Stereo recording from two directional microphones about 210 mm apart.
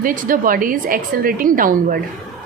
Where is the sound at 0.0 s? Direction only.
40° right (ahead or behind).